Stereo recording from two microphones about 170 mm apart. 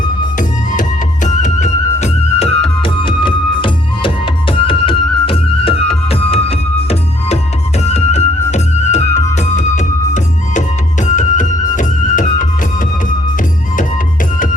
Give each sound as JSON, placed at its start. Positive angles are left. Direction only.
{"t": 0.3, "sound": "music", "side_deg": 50}
{"t": 7.9, "sound": "music", "side_deg": 40}
{"t": 11.0, "sound": "music", "side_deg": 45}